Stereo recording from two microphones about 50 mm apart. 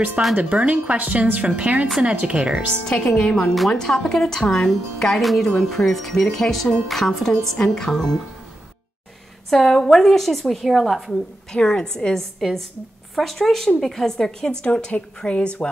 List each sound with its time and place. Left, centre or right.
0.4 s speech: right
2.9 s speech: centre
9.5 s speech: centre
11.5 s speech: centre
12.4 s speech: centre; by 15.7 s left